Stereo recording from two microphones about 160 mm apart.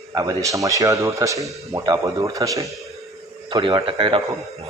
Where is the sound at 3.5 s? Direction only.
30° right (ahead or behind).